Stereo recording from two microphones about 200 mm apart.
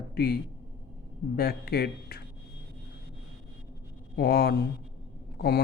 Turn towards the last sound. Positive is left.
turn(degrees=50)  # may be behind; listen again after turning